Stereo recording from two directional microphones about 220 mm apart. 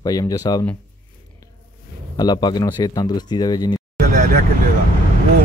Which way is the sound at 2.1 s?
20° left (ahead or behind).